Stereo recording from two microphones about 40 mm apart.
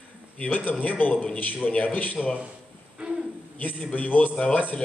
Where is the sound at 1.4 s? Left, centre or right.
Left.